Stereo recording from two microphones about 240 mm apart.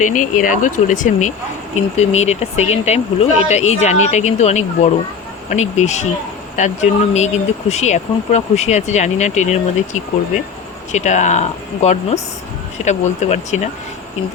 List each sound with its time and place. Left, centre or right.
0.0 s speech: left